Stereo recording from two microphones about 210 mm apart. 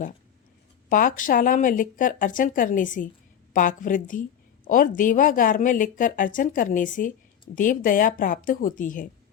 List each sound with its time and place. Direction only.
0.9 s a woman's voice: 40° left (ahead or behind)